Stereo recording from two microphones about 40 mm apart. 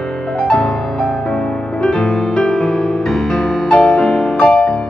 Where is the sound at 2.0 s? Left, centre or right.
Left.